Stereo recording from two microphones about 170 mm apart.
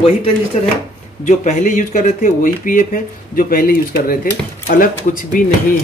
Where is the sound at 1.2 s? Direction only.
45° left (ahead or behind).